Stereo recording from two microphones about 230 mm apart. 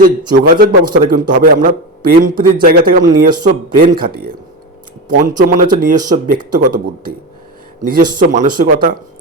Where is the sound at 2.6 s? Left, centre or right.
Right.